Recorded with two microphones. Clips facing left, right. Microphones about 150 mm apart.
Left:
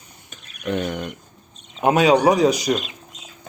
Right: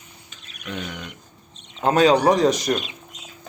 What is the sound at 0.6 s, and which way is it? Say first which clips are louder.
Speech: left 8 dB; 50° left (ahead or behind).